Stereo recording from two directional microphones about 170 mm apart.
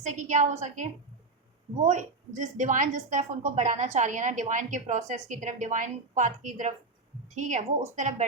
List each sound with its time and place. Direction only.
0.0 s a woman's voice: 45° right (ahead or behind)